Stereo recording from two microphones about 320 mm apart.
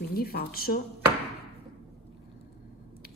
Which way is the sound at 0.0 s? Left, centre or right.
Left.